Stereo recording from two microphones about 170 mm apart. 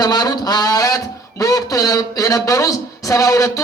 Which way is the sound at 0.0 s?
25° left (ahead or behind).